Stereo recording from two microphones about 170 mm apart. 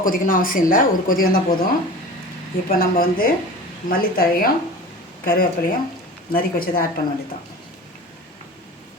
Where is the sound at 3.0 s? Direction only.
60° left (ahead or behind).